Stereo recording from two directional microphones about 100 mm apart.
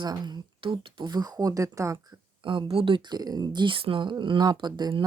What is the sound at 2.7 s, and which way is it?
Speech, 60° right (ahead or behind).